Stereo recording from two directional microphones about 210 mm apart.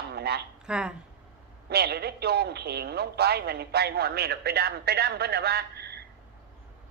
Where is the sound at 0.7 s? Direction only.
5° right (ahead or behind).